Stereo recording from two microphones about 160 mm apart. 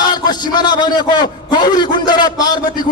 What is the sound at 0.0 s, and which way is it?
A man's voice, 25° left (ahead or behind).